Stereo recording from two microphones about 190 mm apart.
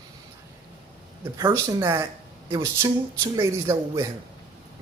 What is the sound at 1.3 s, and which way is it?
A man's voice, 15° right (ahead or behind).